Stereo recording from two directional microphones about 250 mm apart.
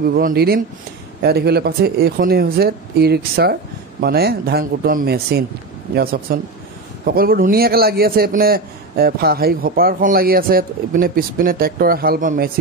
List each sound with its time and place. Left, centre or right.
0.1 s a man's voice: right